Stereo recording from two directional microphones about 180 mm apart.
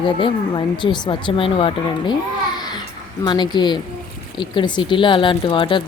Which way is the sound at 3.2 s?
25° left (ahead or behind).